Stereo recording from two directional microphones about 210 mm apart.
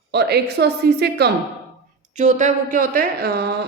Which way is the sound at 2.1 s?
35° right (ahead or behind).